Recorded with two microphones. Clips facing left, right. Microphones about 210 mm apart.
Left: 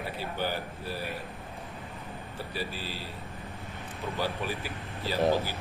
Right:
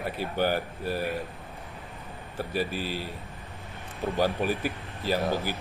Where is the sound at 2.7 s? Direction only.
15° right (ahead or behind).